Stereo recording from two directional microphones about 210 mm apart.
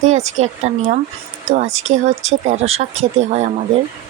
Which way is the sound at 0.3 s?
35° right (ahead or behind).